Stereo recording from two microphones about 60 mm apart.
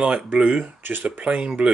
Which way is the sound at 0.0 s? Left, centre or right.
Right.